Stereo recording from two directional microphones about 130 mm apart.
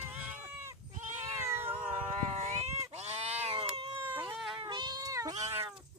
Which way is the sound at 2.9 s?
55° right (ahead or behind).